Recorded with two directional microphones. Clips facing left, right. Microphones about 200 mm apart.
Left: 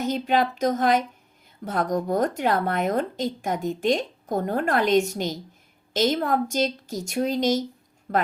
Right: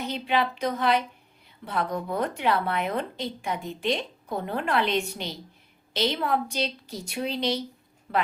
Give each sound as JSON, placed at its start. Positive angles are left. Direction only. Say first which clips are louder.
{"t": 0.0, "sound": "speech", "louder": "left 4 dB", "side_deg": 45}